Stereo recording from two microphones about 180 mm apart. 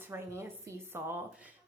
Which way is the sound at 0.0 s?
15° right (ahead or behind).